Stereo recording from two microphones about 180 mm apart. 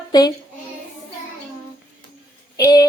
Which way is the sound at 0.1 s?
20° left (ahead or behind).